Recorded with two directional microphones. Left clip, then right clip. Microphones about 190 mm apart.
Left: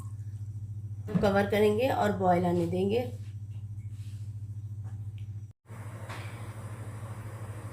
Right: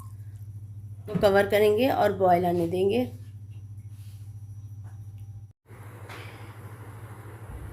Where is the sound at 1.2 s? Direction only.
55° right (ahead or behind).